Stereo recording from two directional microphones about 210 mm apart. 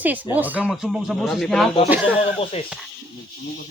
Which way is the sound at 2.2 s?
30° left (ahead or behind).